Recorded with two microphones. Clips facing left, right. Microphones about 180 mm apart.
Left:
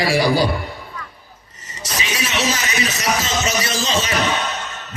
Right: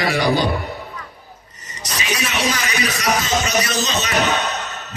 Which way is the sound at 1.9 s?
25° left (ahead or behind).